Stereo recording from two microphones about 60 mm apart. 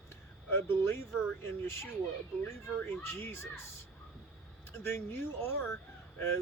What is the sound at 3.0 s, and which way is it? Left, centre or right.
Speech, left.